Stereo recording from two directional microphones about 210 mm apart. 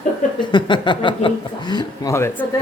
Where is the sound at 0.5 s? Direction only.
20° left (ahead or behind).